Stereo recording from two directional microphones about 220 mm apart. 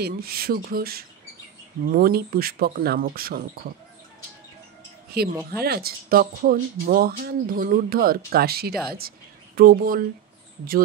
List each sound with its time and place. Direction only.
0.0 s speech: 45° right (ahead or behind)
5.1 s speech: 45° right (ahead or behind)